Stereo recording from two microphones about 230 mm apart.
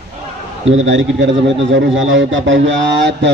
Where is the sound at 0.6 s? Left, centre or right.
Right.